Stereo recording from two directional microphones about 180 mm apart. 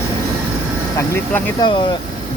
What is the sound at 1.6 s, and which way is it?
Speech, 25° left (ahead or behind).